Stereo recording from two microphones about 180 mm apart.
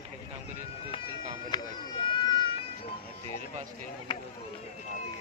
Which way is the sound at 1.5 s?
25° left (ahead or behind).